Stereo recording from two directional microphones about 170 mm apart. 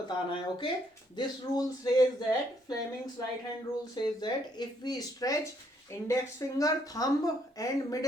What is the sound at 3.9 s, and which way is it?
Speech, 25° left (ahead or behind).